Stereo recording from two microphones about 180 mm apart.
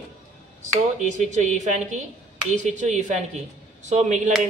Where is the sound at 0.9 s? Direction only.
40° right (ahead or behind).